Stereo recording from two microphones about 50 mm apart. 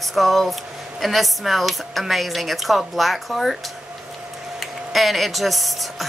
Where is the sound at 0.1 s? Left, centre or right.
Centre.